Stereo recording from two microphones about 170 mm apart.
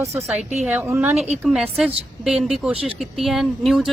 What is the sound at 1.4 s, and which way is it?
A woman's voice, 5° right (ahead or behind).